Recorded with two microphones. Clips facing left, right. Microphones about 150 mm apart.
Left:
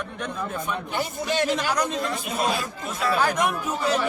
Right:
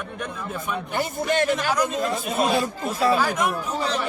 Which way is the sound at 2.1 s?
25° right (ahead or behind).